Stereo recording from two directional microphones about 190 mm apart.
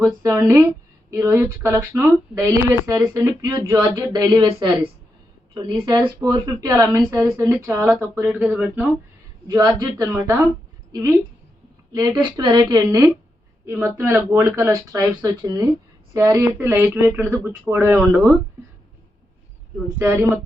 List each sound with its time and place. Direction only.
0.0 s speech: 15° right (ahead or behind)
9.5 s speech: 20° right (ahead or behind)
11.9 s speech: 20° right (ahead or behind)
20.0 s speech: 10° right (ahead or behind)